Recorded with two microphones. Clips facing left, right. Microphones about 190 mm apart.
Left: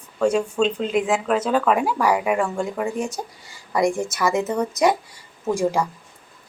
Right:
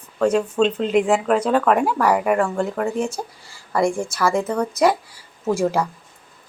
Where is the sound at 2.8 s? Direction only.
15° left (ahead or behind).